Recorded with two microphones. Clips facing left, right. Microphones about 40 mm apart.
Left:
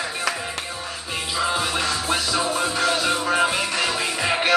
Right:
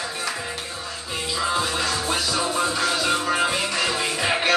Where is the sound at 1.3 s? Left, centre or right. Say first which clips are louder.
Left 1 dB; centre.